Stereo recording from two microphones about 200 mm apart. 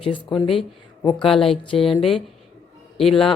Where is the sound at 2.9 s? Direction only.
Centre (ahead or behind).